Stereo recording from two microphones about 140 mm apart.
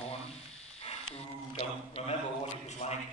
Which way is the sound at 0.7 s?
45° left (ahead or behind).